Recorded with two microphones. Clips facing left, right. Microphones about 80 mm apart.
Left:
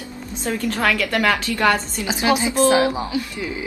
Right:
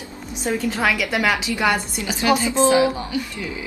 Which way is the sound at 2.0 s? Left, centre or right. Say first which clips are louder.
Right 1 dB; centre.